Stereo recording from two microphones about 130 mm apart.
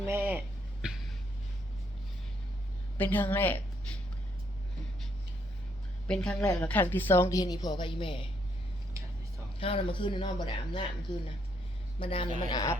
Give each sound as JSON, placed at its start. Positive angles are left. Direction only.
{"t": 0.0, "sound": "a sound", "side_deg": -15}
{"t": 3.0, "sound": "a woman's voice", "side_deg": 15}
{"t": 6.1, "sound": "a woman's voice", "side_deg": 5}
{"t": 9.6, "sound": "a woman's voice", "side_deg": 45}
{"t": 12.5, "sound": "speech", "side_deg": 30}